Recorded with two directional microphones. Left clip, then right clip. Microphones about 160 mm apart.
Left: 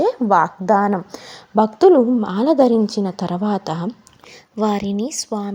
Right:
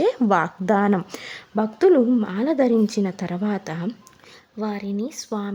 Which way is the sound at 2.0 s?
10° right (ahead or behind).